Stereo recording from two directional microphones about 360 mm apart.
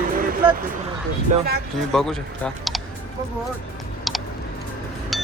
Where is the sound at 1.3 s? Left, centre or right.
Centre.